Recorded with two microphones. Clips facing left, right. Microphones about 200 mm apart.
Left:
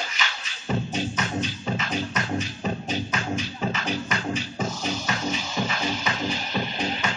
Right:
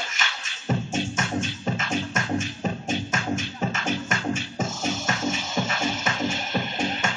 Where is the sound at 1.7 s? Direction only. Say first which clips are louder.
Even; 50° right (ahead or behind).